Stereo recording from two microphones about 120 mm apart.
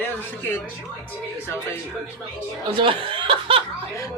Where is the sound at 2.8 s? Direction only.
45° right (ahead or behind).